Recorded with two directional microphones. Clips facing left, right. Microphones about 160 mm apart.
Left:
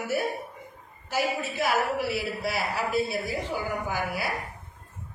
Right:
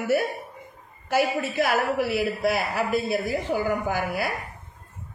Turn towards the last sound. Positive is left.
turn(degrees=-50)  # may be behind; listen again after turning